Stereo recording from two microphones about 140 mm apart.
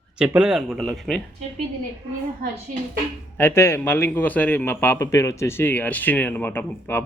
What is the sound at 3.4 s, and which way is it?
A man's voice, 15° left (ahead or behind).